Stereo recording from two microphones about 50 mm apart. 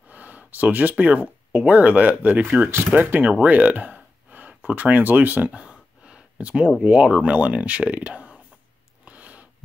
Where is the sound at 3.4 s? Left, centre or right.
Right.